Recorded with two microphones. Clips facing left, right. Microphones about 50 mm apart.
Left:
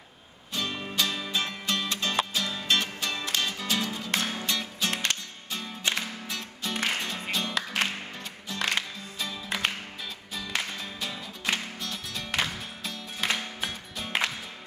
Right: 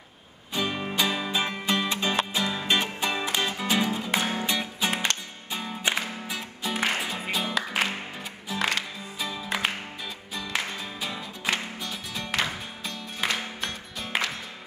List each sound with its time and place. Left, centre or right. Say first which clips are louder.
0.5 s music: right 4 dB; centre